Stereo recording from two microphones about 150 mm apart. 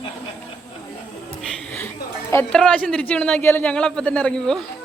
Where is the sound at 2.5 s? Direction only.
5° left (ahead or behind).